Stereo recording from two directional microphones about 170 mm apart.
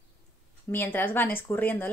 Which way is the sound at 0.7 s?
10° left (ahead or behind).